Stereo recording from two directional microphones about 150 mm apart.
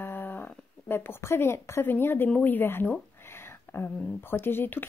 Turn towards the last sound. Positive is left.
turn(degrees=15)  # may be behind; listen again after turning